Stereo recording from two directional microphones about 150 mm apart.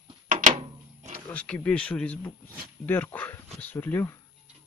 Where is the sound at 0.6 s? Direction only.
40° right (ahead or behind).